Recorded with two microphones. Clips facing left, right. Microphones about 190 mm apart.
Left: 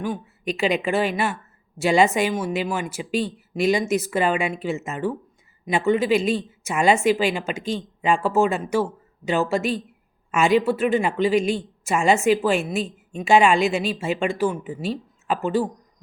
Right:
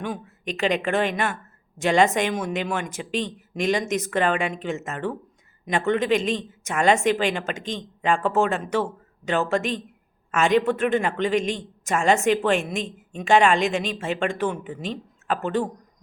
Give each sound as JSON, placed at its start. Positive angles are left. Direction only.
{"t": 0.0, "sound": "speech", "side_deg": 5}